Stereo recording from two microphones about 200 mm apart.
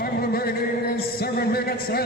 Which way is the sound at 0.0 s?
50° left (ahead or behind).